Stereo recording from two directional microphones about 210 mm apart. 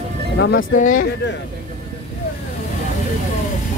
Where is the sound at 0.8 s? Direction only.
40° left (ahead or behind).